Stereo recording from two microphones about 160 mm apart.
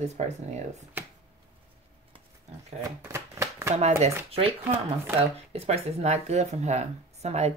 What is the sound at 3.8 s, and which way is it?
Speech, 40° right (ahead or behind).